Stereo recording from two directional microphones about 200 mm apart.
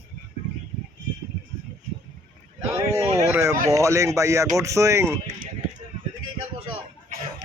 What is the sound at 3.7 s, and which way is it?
Speech, 15° right (ahead or behind).